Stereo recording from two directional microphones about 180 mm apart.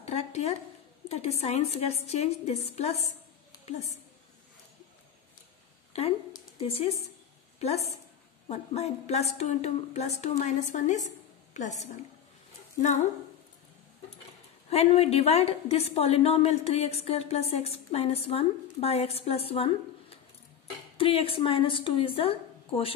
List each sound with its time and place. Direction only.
0.0 s a sound: 35° left (ahead or behind)
1.0 s a woman's voice: 35° left (ahead or behind)
5.9 s a woman's voice: 35° left (ahead or behind)
14.7 s a woman's voice: 35° left (ahead or behind)